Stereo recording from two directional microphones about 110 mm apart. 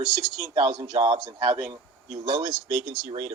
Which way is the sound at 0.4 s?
45° right (ahead or behind).